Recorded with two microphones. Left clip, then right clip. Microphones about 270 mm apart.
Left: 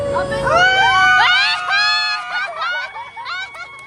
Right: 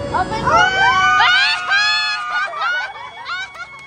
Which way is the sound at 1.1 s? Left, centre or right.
Centre.